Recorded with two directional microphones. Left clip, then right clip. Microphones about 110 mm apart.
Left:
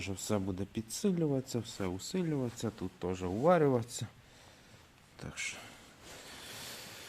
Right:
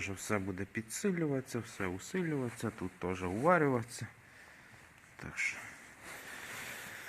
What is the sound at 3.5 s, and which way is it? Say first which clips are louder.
Speech: left 1 dB; 45° left (ahead or behind).